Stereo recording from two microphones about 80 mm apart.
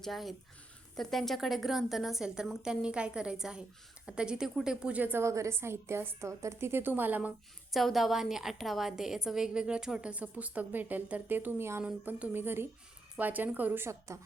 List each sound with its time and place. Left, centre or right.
0.0 s a woman's voice: centre; by 5.2 s right
5.2 s a woman's voice: right; by 7.3 s centre
7.7 s a woman's voice: centre; by 11.8 s right
11.8 s a woman's voice: centre